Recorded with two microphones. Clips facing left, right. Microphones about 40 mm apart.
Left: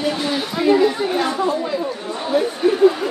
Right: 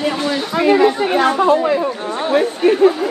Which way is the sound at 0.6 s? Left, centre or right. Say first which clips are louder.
Right 3 dB; right.